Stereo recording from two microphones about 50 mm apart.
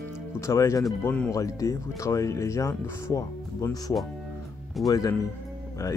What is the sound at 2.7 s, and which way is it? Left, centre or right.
Speech, left.